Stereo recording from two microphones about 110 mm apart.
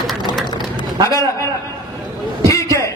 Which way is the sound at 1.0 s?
30° left (ahead or behind).